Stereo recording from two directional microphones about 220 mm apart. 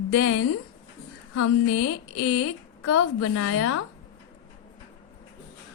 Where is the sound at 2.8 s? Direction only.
90° left.